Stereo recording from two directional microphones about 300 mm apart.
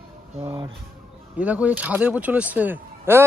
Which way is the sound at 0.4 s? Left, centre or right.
Centre.